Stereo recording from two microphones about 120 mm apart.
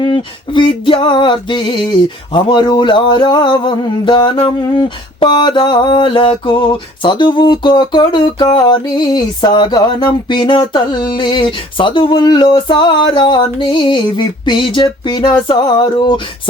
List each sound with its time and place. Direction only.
0.0 s music: 45° left (ahead or behind)